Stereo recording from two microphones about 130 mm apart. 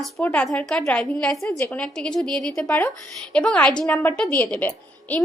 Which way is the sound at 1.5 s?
15° left (ahead or behind).